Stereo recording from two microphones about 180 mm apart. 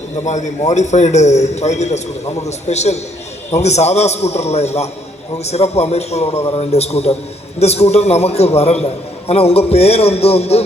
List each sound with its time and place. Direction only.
0.3 s a man's voice: 40° left (ahead or behind)